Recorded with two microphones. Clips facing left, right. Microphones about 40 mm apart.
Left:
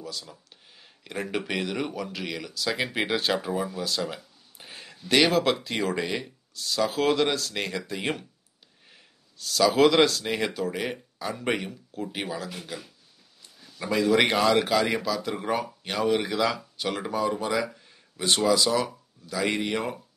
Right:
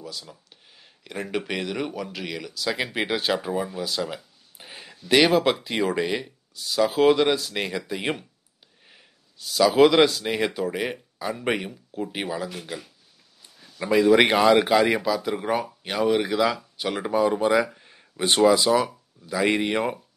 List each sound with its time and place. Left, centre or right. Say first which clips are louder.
0.0 s speech: even; centre; by 20.0 s right